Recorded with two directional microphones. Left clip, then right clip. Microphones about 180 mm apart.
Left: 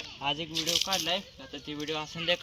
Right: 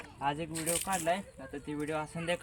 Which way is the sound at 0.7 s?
40° right (ahead or behind).